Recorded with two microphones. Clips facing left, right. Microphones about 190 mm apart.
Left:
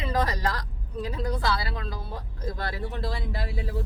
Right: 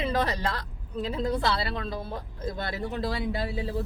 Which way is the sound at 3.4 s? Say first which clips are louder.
Right 3 dB; 20° right (ahead or behind).